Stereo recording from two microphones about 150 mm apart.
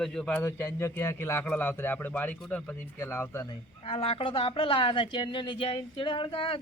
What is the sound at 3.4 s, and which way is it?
A woman's voice, 30° left (ahead or behind).